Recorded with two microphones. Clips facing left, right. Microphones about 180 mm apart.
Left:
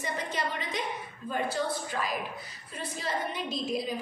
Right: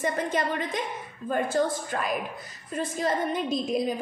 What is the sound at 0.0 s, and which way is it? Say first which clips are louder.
A woman's voice: right 6 dB; 50° right (ahead or behind).